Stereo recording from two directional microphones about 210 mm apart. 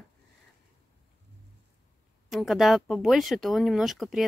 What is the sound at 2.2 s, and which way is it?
Speech, centre (ahead or behind).